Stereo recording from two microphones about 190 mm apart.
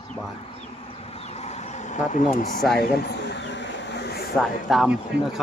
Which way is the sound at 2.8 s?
55° left (ahead or behind).